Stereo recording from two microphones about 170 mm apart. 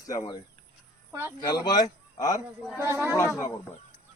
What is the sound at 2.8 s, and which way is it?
Speech, 15° right (ahead or behind).